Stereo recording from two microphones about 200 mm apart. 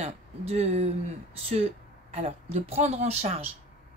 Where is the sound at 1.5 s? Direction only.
30° right (ahead or behind).